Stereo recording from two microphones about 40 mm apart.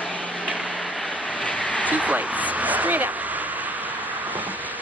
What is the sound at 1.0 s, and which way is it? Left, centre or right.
Vehicle, left.